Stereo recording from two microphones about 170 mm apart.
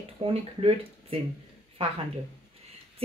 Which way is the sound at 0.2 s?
35° right (ahead or behind).